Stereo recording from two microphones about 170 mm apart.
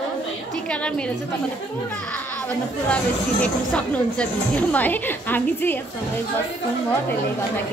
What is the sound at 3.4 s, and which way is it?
A woman's voice, 5° left (ahead or behind).